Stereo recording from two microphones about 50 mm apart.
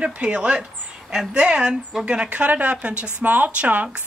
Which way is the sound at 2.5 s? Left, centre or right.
Right.